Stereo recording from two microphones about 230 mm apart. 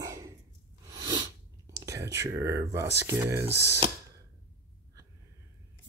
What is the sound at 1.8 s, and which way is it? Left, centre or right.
Whispering, centre.